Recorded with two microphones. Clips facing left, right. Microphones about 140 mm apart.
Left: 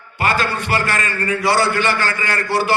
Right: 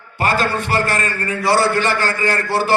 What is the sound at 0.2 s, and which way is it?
A man's voice, 40° right (ahead or behind).